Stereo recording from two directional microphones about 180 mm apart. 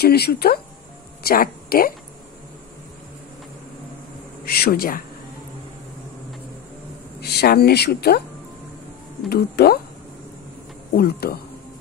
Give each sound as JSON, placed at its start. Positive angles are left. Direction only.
{"t": 0.0, "sound": "a woman's voice", "side_deg": 60}
{"t": 4.5, "sound": "a woman's voice", "side_deg": 60}
{"t": 7.2, "sound": "a woman's voice", "side_deg": 60}
{"t": 9.3, "sound": "a woman's voice", "side_deg": 60}
{"t": 11.0, "sound": "a woman's voice", "side_deg": 60}